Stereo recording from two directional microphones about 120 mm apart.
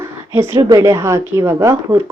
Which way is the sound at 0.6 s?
30° right (ahead or behind).